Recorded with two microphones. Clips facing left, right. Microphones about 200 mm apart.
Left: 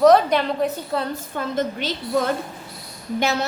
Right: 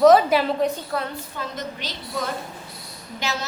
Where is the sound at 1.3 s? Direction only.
50° left (ahead or behind).